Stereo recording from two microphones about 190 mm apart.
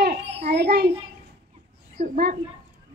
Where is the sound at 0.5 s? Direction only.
55° right (ahead or behind).